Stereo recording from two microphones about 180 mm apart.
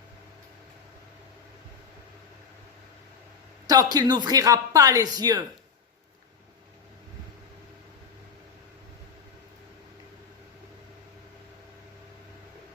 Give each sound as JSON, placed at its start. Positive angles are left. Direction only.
{"t": 3.7, "sound": "speech", "side_deg": -20}